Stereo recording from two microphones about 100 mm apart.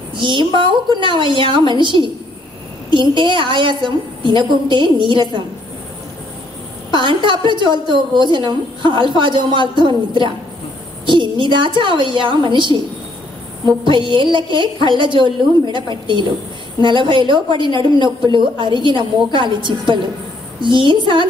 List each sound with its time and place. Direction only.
0.2 s a woman's voice: 50° right (ahead or behind)
6.9 s a woman's voice: 55° right (ahead or behind)